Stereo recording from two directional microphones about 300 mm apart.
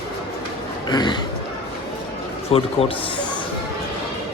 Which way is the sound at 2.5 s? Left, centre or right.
Centre.